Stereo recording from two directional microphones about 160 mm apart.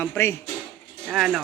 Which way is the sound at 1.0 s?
5° right (ahead or behind).